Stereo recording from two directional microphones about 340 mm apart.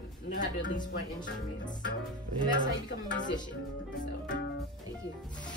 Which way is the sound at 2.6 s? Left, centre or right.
Left.